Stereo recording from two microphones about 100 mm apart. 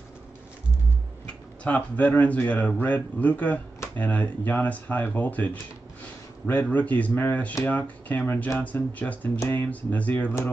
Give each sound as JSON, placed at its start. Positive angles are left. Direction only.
{"t": 1.2, "sound": "speech", "side_deg": 15}